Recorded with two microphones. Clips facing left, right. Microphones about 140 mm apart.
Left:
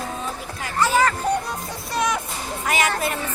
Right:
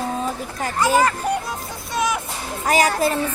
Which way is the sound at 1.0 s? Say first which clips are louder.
Left 1 dB; 10° right (ahead or behind).